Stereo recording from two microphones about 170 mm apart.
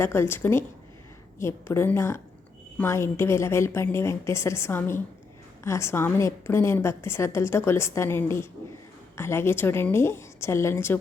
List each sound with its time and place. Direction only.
0.0 s a woman's voice: 15° left (ahead or behind)